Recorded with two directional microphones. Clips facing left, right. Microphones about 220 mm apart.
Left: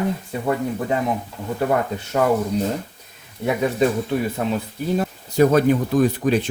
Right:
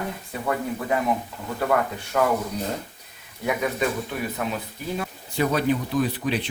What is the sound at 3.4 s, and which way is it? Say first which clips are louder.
Speech: left 5 dB; 30° left (ahead or behind).